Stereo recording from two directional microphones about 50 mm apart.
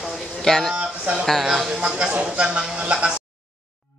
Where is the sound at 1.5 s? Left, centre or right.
Centre.